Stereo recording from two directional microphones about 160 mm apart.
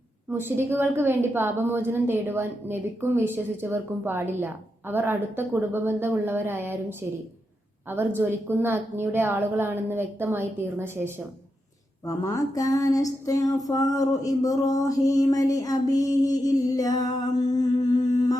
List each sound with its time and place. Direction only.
0.3 s a woman's voice: 15° right (ahead or behind)
7.9 s a woman's voice: 15° right (ahead or behind)
12.0 s a sound: 20° left (ahead or behind)